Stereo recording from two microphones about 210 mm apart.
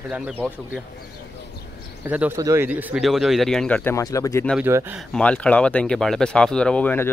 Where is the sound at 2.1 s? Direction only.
10° right (ahead or behind); by 4.5 s 15° left (ahead or behind).